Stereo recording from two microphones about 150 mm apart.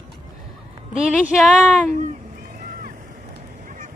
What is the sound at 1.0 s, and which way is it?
Speech, 5° right (ahead or behind).